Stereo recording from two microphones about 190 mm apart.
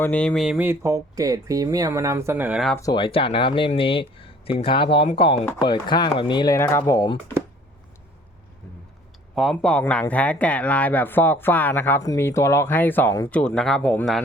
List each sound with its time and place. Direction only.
0.0 s speech: 5° left (ahead or behind)
2.7 s speech: 20° left (ahead or behind)
9.3 s speech: centre (ahead or behind)